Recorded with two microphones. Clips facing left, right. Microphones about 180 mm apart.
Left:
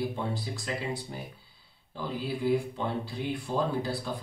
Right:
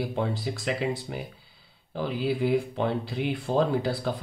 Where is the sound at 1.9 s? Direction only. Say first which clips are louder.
Right 6 dB; 90° right.